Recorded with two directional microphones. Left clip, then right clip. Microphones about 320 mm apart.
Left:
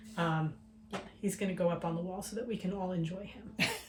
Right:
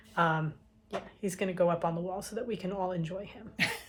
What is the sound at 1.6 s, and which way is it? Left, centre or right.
Speech, right.